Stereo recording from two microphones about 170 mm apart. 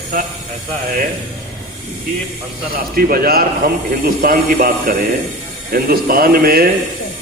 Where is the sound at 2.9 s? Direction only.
60° right (ahead or behind).